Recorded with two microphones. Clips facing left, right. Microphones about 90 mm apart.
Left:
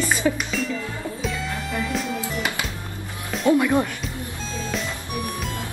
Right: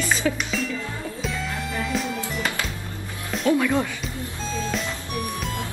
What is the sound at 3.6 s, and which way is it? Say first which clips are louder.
Speech: left 2 dB; 15° left (ahead or behind).